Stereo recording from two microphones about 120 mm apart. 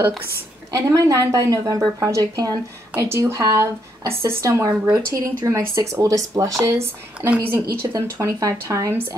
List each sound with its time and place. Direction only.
0.7 s a woman's voice: 25° right (ahead or behind)